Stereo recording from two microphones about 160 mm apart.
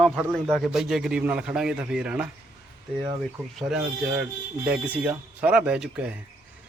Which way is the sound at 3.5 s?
5° right (ahead or behind).